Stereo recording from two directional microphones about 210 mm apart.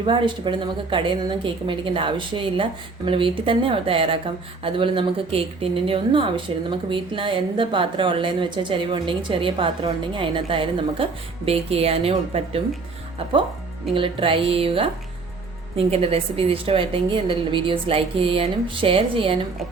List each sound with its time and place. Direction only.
0.0 s speech: 25° right (ahead or behind)
13.9 s speech: 25° right (ahead or behind)
15.9 s speech: 25° right (ahead or behind)